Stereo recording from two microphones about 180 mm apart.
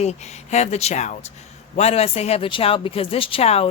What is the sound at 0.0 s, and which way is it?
A woman's voice, 40° left (ahead or behind).